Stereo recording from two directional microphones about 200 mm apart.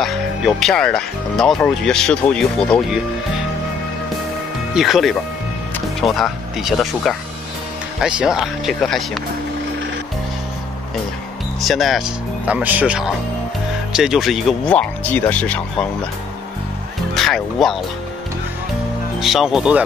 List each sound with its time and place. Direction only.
0.0 s speech: centre (ahead or behind)
4.7 s speech: centre (ahead or behind)
11.6 s speech: centre (ahead or behind)
17.1 s speech: centre (ahead or behind)
19.1 s speech: centre (ahead or behind)